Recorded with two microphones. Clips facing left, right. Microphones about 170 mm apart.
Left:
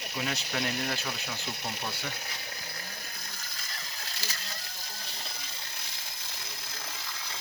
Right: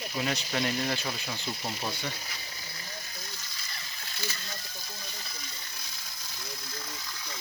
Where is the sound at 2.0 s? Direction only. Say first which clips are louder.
Right 1 dB; 65° left (ahead or behind).